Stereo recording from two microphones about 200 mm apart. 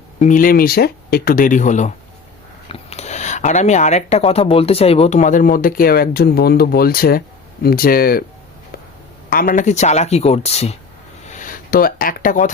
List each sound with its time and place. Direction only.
0.2 s speech: 40° left (ahead or behind)
9.3 s speech: 45° left (ahead or behind)